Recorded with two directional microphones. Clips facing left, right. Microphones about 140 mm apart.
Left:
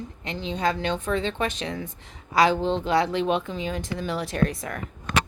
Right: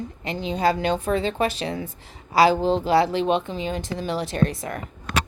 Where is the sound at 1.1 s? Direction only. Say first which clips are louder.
Right 2 dB; 40° right (ahead or behind).